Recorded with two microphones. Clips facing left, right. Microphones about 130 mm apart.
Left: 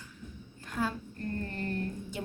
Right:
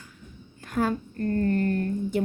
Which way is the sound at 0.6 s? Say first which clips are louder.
Right 8 dB; 60° right (ahead or behind).